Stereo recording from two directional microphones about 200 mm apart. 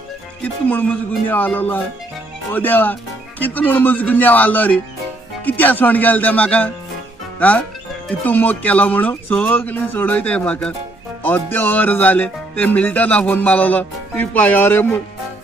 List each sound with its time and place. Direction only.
0.4 s music: 10° left (ahead or behind)
7.3 s speech: 10° left (ahead or behind)
8.2 s music: 10° left (ahead or behind)